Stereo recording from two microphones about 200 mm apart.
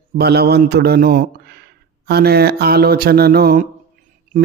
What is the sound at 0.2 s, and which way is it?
Speech, 55° right (ahead or behind).